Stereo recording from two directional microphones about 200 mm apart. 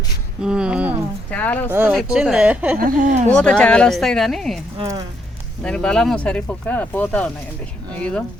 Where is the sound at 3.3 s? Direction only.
5° left (ahead or behind).